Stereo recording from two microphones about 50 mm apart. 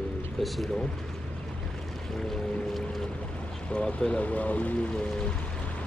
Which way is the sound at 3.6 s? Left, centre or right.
Left.